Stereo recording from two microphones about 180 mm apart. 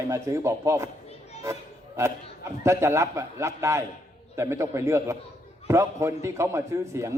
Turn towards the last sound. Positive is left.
turn(degrees=-15)  # may be behind; listen again after turning